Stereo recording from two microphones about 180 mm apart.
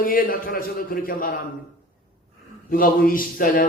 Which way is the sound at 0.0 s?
50° left (ahead or behind).